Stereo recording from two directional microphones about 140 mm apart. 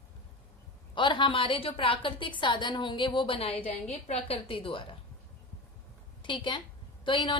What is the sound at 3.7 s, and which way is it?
A woman's voice, 55° left (ahead or behind).